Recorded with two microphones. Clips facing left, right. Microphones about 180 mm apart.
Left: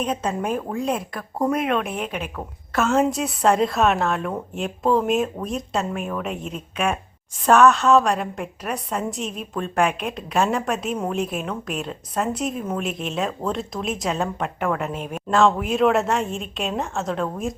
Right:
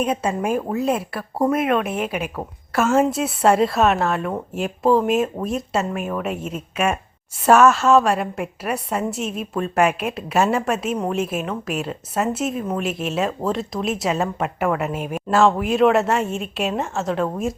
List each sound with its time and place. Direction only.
0.0 s speech: 10° right (ahead or behind)